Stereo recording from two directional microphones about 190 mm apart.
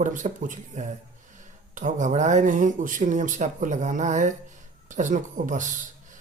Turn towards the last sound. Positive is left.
turn(degrees=-40)  # may be behind; listen again after turning